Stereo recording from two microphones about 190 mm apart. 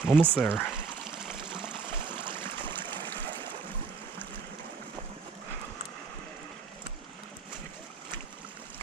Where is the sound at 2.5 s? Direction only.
25° right (ahead or behind).